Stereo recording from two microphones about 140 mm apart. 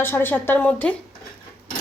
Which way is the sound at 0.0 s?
15° left (ahead or behind).